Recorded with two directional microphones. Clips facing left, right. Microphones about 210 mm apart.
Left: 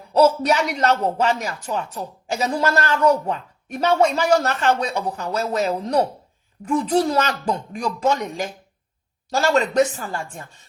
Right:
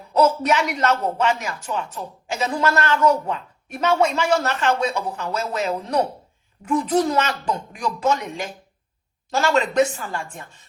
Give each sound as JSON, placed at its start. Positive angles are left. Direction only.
{"t": 0.1, "sound": "a woman's voice", "side_deg": 35}